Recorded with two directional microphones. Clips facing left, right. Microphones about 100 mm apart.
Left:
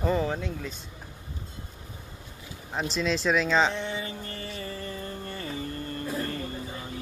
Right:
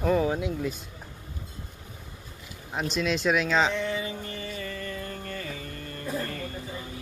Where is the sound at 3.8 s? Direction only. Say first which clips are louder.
Right 3 dB; 30° left (ahead or behind).